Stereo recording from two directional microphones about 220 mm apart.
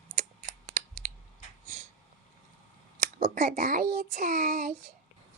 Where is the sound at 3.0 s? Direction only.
40° right (ahead or behind).